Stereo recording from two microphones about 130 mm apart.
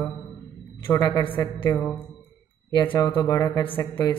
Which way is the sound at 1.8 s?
10° left (ahead or behind).